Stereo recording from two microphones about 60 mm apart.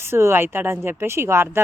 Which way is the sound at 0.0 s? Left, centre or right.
Right.